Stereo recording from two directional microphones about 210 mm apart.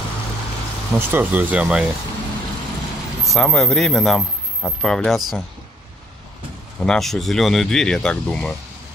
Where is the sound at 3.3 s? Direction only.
Centre (ahead or behind).